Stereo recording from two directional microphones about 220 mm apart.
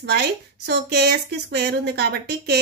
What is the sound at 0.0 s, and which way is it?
Speech, 50° right (ahead or behind).